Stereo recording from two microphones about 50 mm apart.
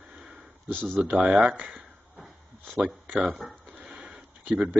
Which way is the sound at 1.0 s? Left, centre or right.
Right.